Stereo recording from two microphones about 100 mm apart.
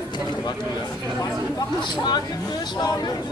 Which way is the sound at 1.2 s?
45° left (ahead or behind).